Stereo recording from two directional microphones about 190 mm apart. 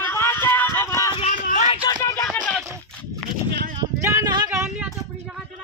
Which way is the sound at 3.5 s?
60° right (ahead or behind).